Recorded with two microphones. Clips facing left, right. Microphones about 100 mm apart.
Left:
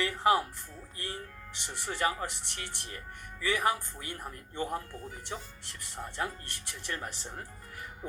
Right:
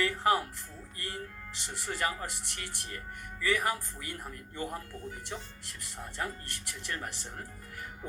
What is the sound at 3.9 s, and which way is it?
Speech, 30° left (ahead or behind).